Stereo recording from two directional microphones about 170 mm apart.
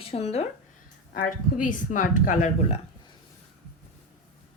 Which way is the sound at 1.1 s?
55° left (ahead or behind).